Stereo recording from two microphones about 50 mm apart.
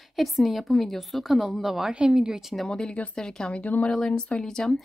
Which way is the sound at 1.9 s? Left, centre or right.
Centre.